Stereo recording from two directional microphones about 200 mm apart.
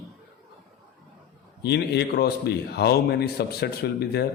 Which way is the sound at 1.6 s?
55° left (ahead or behind).